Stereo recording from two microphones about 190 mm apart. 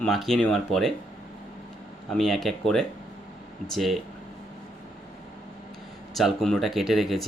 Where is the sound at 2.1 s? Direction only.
Centre (ahead or behind).